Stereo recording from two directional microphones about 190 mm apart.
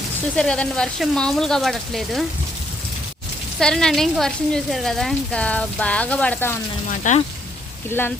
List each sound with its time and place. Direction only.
0.3 s speech: 5° left (ahead or behind)
3.6 s speech: 5° left (ahead or behind)
7.0 s speech: 40° left (ahead or behind)
7.9 s speech: 10° left (ahead or behind)